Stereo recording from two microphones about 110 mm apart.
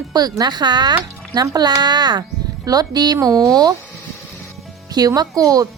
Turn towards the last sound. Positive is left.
turn(degrees=-30)  # may be behind; listen again after turning